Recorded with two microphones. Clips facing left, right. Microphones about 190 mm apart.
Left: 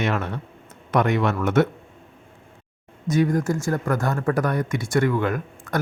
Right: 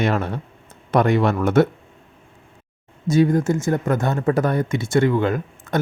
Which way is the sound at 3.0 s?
25° right (ahead or behind).